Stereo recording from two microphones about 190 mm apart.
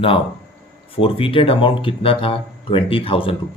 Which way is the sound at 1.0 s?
30° left (ahead or behind).